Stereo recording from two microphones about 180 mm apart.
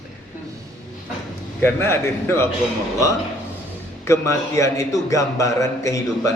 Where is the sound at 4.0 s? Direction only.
15° left (ahead or behind).